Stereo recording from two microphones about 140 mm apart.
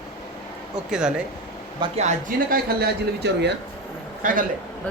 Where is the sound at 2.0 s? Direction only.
65° right (ahead or behind).